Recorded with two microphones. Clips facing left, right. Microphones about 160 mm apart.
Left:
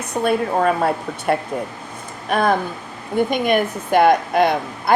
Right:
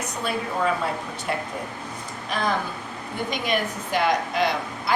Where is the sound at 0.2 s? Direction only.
55° left (ahead or behind).